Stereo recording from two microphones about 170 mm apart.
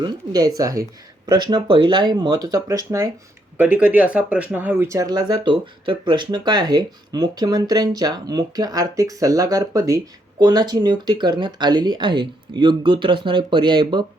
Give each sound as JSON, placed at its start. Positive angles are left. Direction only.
{"t": 0.0, "sound": "speech", "side_deg": -25}
{"t": 3.6, "sound": "speech", "side_deg": -10}